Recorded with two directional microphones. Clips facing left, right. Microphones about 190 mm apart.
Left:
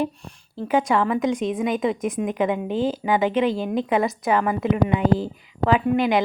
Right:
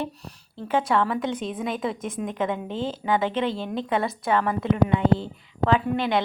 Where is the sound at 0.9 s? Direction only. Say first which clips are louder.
Left 3 dB; centre (ahead or behind).